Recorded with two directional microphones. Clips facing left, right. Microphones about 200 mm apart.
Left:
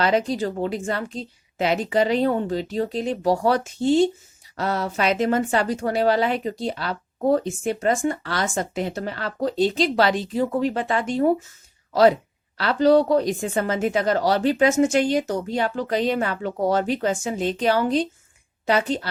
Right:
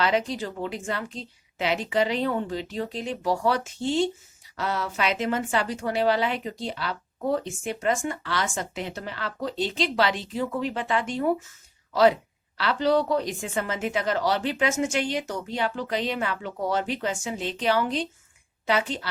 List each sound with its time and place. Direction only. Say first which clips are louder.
0.0 s a woman's voice: left 4 dB; 40° left (ahead or behind)
12.5 s a woman's voice: left 6 dB; 40° left (ahead or behind)